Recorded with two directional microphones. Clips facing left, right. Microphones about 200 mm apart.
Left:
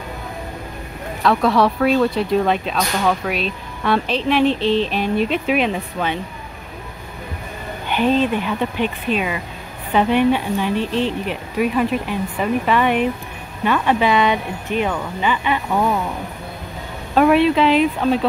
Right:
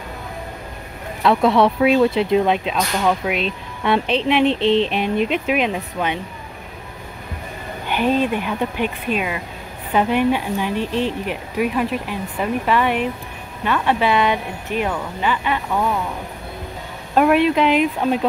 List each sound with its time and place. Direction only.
1.2 s speech: 20° right (ahead or behind)
1.8 s speech: 10° right (ahead or behind)
3.3 s speech: 20° right (ahead or behind)
5.5 s speech: 10° right (ahead or behind)
7.9 s speech: 10° right (ahead or behind); by 16.0 s 10° left (ahead or behind)
17.1 s speech: 5° right (ahead or behind)